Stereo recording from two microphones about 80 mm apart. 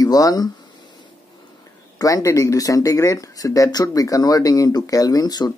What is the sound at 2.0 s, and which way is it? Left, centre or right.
Speech, left.